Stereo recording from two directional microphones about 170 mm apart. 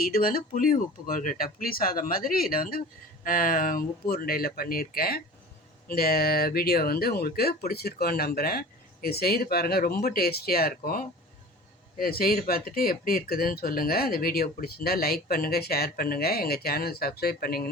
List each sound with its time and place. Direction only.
0.0 s speech: 60° left (ahead or behind)